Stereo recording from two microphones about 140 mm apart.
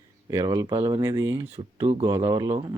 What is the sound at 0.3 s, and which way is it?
Speech, 25° right (ahead or behind).